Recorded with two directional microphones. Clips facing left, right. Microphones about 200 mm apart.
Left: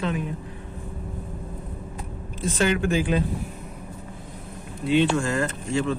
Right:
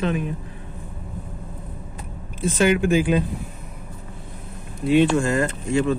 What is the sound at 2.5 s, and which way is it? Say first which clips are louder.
Speech: right 4 dB; 15° right (ahead or behind).